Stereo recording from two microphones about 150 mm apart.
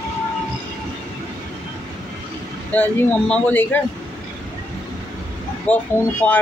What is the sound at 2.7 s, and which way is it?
Speech, 10° left (ahead or behind).